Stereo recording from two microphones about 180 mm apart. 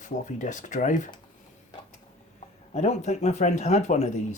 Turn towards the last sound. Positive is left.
turn(degrees=40)  # may be behind; listen again after turning